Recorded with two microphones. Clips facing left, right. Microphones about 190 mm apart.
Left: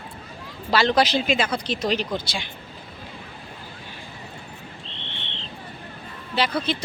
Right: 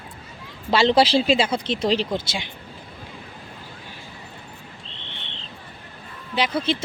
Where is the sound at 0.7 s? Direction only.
25° right (ahead or behind).